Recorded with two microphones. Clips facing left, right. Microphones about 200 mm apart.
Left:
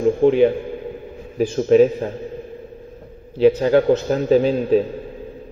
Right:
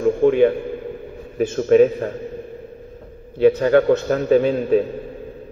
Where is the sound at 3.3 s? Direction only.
55° right (ahead or behind).